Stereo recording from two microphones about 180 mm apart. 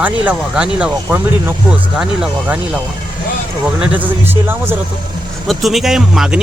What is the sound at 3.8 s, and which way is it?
Speech, 10° right (ahead or behind).